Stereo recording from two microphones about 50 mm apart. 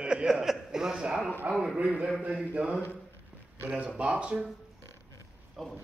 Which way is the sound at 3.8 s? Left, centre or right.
Right.